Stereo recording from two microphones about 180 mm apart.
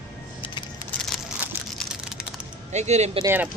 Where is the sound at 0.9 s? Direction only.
10° left (ahead or behind).